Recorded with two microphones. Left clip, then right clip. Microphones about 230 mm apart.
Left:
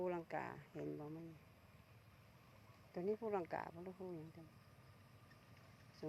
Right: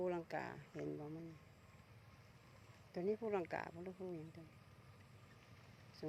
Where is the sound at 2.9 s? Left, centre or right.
Centre.